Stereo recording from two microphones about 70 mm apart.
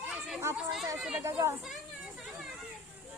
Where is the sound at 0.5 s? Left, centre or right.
Centre.